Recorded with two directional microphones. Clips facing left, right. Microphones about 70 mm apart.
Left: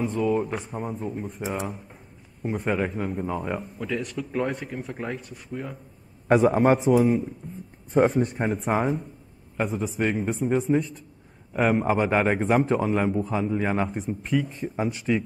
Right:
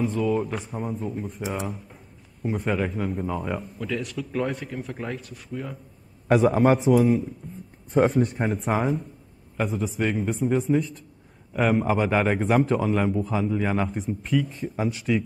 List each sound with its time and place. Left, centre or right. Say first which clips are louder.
0.0 s a man's voice: even; centre